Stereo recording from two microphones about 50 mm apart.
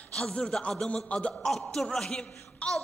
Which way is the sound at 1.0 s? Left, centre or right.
Left.